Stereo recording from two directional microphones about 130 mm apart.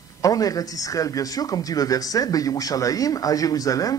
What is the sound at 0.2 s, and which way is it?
A man's voice, 25° left (ahead or behind).